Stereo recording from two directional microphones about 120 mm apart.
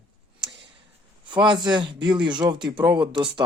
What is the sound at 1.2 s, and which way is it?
A man's voice, 40° right (ahead or behind).